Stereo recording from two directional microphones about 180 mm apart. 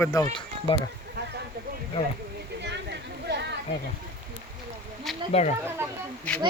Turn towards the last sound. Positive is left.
turn(degrees=5)  # may be behind; listen again after turning